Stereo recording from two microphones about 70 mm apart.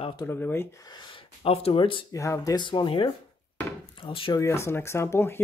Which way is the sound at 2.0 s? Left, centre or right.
Left.